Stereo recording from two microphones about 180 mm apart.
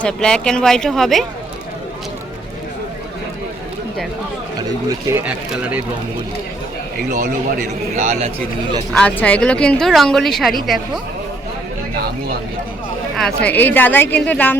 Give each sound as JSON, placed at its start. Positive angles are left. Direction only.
{"t": 0.0, "sound": "speech", "side_deg": 5}
{"t": 4.9, "sound": "speech", "side_deg": -15}
{"t": 7.1, "sound": "a man's voice", "side_deg": -45}
{"t": 8.9, "sound": "speech", "side_deg": 5}
{"t": 13.1, "sound": "a woman's voice", "side_deg": 5}